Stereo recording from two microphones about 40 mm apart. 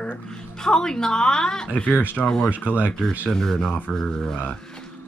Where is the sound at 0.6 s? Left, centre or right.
Centre.